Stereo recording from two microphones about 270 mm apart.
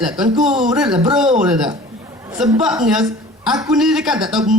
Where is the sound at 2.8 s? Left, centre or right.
Centre.